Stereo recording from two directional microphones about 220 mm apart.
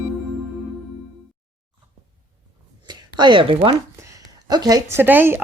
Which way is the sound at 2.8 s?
20° right (ahead or behind).